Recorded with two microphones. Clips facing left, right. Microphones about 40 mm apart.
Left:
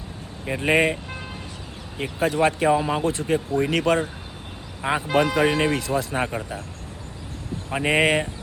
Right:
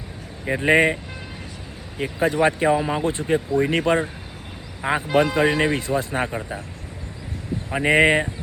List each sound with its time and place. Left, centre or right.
0.4 s speech: centre
2.1 s speech: right
2.6 s speech: centre
3.0 s speech: right
4.8 s speech: centre
5.4 s speech: right
6.1 s speech: centre
7.7 s speech: centre
7.9 s speech: centre